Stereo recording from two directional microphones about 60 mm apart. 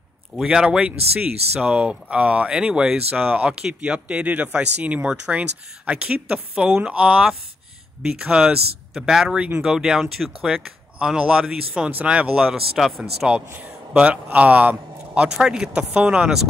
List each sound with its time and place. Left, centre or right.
0.5 s speech: centre
6.5 s speech: centre
12.4 s speech: centre
13.6 s a man's voice: right
15.2 s speech: centre